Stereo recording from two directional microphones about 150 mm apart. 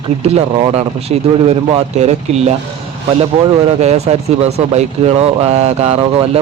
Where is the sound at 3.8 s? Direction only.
45° right (ahead or behind).